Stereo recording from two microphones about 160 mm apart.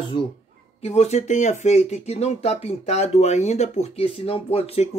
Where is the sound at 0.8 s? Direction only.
40° left (ahead or behind).